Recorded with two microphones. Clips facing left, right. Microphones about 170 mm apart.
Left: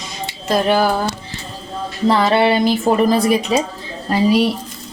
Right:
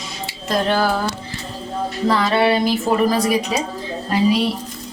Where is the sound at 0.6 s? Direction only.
15° left (ahead or behind).